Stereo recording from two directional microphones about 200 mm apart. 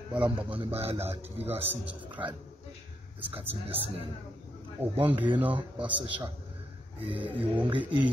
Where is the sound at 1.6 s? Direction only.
10° right (ahead or behind).